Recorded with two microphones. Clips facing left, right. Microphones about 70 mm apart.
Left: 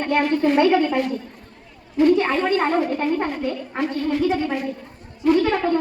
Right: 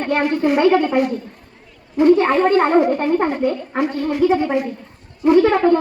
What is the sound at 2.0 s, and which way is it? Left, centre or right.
A woman's voice, right.